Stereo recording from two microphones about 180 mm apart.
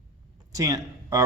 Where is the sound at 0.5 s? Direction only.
20° right (ahead or behind).